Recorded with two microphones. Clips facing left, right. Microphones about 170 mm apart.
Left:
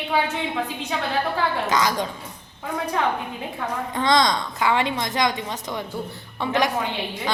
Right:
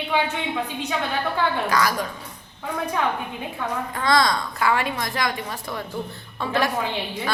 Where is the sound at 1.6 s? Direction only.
20° left (ahead or behind).